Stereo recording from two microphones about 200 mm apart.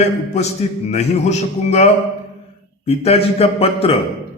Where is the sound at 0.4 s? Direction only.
35° left (ahead or behind).